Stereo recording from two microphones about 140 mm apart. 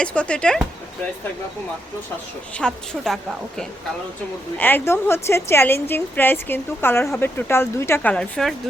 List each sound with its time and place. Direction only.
0.0 s a woman's voice: 10° left (ahead or behind)
2.6 s a woman's voice: 5° left (ahead or behind)
4.5 s a woman's voice: 15° left (ahead or behind)